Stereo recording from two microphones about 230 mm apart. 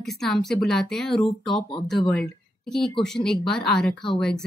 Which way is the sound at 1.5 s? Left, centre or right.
Left.